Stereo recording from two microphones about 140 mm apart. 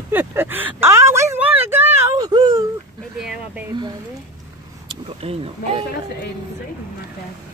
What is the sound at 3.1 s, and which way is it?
Speech, 5° right (ahead or behind).